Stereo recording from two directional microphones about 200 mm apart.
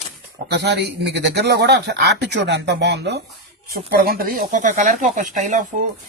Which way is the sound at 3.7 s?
50° right (ahead or behind).